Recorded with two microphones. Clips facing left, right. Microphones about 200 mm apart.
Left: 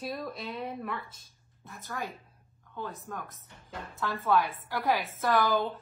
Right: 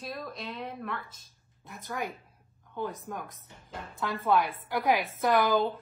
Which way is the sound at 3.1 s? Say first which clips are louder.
Right 2 dB; 15° right (ahead or behind).